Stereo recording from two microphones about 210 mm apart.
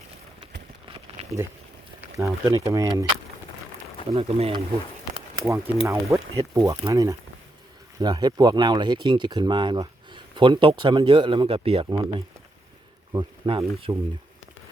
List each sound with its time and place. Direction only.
2.0 s speech: 15° right (ahead or behind)
4.1 s speech: 30° right (ahead or behind)
5.5 s speech: 15° right (ahead or behind)